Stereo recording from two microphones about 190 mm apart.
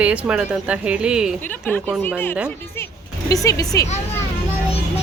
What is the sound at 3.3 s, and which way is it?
Speech, 20° left (ahead or behind).